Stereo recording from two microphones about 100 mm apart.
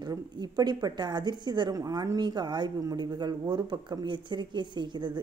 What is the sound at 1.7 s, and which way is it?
Speech, 40° right (ahead or behind).